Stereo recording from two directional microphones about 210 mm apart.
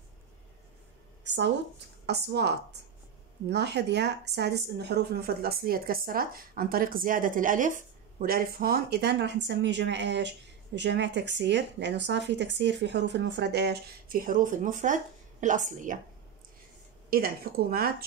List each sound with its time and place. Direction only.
1.2 s a woman's voice: 55° right (ahead or behind); by 16.0 s 35° right (ahead or behind)
17.1 s speech: 45° right (ahead or behind)